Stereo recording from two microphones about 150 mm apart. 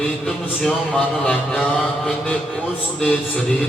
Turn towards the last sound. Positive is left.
turn(degrees=5)  # may be behind; listen again after turning